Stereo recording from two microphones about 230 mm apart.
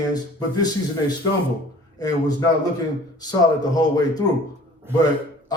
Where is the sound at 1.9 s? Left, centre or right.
Centre.